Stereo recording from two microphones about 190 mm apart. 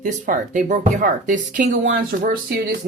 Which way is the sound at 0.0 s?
45° right (ahead or behind).